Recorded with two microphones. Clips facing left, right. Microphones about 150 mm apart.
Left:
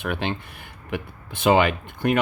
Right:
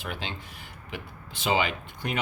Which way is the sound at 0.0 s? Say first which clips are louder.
Left 9 dB; 60° left (ahead or behind).